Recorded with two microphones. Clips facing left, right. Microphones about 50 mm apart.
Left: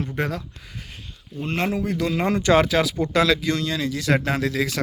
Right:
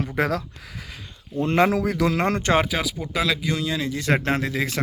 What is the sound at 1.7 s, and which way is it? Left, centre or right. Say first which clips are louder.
Speech: right 2 dB; right.